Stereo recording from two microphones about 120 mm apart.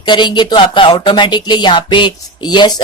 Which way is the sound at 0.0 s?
40° left (ahead or behind).